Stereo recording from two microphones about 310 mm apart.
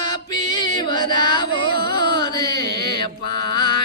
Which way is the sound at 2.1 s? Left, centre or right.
Centre.